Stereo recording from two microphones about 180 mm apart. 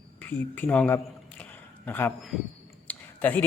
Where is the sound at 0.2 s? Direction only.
10° left (ahead or behind).